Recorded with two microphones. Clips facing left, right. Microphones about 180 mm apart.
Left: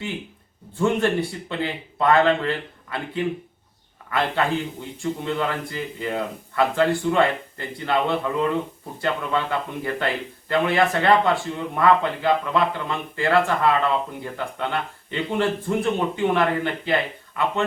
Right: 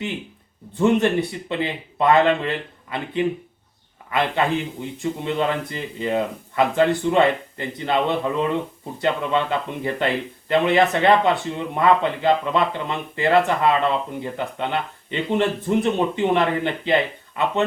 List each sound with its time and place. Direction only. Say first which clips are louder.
0.7 s speech: right 3 dB; 20° right (ahead or behind)